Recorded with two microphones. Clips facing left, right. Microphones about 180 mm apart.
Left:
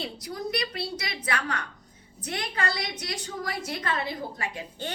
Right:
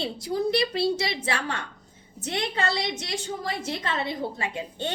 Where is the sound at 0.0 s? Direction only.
25° right (ahead or behind).